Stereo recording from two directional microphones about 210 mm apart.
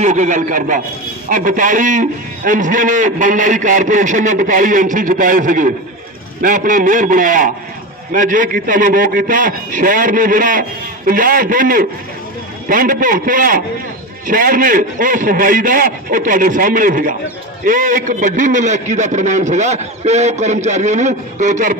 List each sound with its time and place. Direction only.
0.0 s a man's voice: 35° right (ahead or behind)